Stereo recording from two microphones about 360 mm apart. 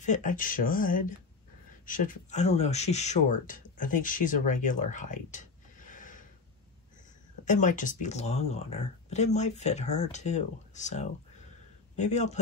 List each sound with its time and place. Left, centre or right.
0.0 s speech: left
7.4 s speech: left